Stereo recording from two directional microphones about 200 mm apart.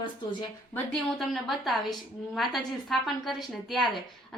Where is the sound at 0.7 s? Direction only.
5° left (ahead or behind).